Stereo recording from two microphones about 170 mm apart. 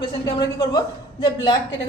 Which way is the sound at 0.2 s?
20° left (ahead or behind).